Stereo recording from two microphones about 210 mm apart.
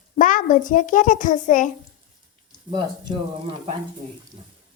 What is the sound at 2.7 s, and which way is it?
Speech, 25° right (ahead or behind).